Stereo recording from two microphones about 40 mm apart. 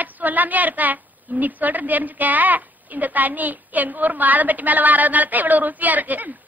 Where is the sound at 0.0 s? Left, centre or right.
Right.